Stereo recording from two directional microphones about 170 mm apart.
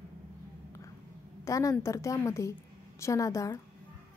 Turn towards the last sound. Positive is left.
turn(degrees=20)  # may be behind; listen again after turning